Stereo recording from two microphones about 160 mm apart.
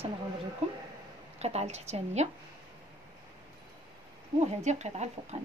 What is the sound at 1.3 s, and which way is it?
Speech, 40° right (ahead or behind).